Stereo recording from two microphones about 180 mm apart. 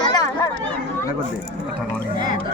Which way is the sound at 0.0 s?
20° left (ahead or behind).